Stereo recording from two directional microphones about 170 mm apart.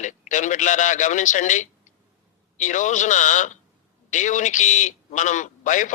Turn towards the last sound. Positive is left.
turn(degrees=50)  # may be behind; listen again after turning